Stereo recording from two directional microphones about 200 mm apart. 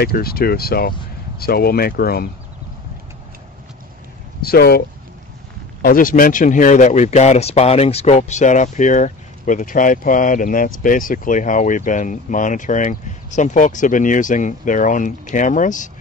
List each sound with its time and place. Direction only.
0.0 s speech: 50° left (ahead or behind)
4.4 s speech: 50° left (ahead or behind)